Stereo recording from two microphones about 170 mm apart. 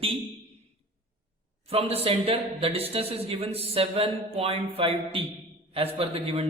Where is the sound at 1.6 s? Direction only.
35° right (ahead or behind).